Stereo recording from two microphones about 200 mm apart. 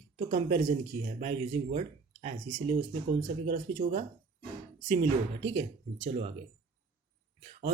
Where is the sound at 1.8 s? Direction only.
35° right (ahead or behind).